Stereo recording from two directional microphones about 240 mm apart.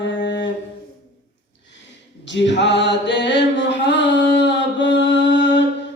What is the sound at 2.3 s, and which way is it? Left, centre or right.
Mantra, left.